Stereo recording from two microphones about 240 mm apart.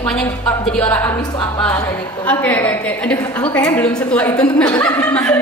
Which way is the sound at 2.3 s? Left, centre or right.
Centre.